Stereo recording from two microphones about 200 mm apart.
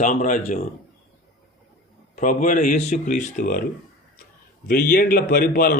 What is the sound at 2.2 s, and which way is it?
Speech, 40° left (ahead or behind).